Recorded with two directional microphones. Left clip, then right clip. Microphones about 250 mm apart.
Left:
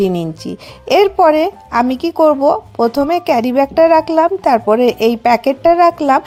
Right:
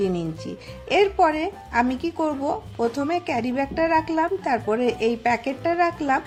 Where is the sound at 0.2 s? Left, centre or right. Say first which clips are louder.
Left 8 dB; left.